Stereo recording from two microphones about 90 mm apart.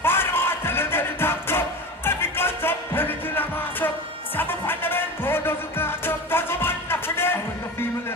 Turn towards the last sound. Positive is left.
turn(degrees=25)  # may be behind; listen again after turning